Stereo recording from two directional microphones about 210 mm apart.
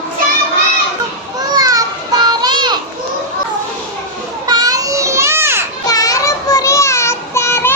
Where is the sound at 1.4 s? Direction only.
20° right (ahead or behind).